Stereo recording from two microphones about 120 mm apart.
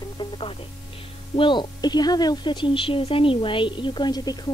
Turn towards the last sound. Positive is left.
turn(degrees=35)  # may be behind; listen again after turning